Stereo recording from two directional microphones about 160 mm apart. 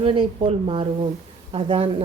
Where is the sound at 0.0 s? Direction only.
35° right (ahead or behind).